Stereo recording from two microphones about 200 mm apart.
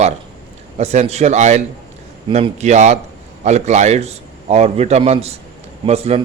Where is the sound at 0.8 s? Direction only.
30° right (ahead or behind).